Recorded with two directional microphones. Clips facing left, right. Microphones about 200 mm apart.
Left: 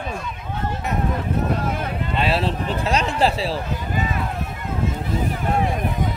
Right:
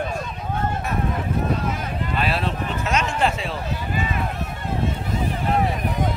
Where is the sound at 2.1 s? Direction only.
25° left (ahead or behind).